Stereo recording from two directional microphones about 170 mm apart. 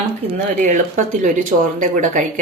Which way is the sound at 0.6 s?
45° right (ahead or behind).